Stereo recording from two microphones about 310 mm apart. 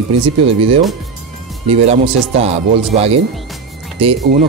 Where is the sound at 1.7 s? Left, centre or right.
Centre.